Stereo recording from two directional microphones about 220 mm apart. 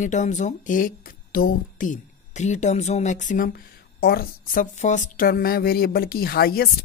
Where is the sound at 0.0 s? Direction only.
35° left (ahead or behind).